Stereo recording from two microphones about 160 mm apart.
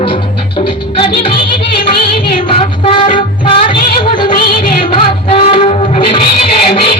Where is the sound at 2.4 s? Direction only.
35° left (ahead or behind).